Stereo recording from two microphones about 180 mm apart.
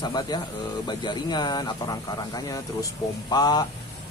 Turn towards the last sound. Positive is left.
turn(degrees=25)  # may be behind; listen again after turning